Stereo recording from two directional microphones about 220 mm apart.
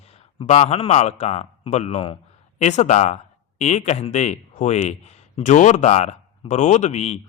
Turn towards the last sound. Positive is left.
turn(degrees=30)  # may be behind; listen again after turning